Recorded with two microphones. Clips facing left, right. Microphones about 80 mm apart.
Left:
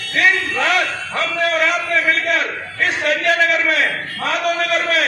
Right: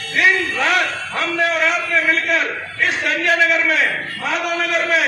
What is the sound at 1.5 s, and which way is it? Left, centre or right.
Speech, centre.